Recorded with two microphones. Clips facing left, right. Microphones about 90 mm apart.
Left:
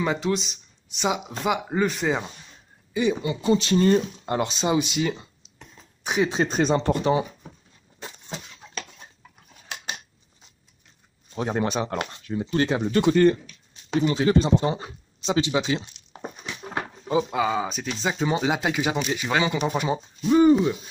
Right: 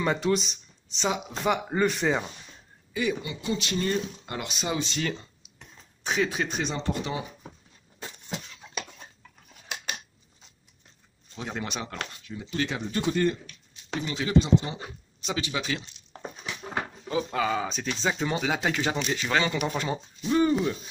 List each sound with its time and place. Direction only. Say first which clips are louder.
0.0 s speech: left 1 dB; 5° left (ahead or behind)
0.8 s speech: left 3 dB; 10° left (ahead or behind)
2.9 s speech: left 5 dB; 20° left (ahead or behind)
3.3 s speech: left 9 dB; 35° left (ahead or behind)
4.7 s speech: left 6 dB; 15° left (ahead or behind)
6.3 s speech: left 8 dB; 35° left (ahead or behind)
11.3 s speech: left 9 dB; 40° left (ahead or behind)
12.8 s speech: left 8 dB; 70° left (ahead or behind)
14.0 s speech: left 4 dB; 40° left (ahead or behind)
14.8 s speech: left 2 dB; 25° left (ahead or behind)